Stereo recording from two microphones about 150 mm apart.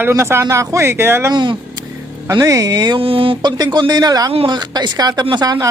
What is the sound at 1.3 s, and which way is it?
Speech, 30° right (ahead or behind).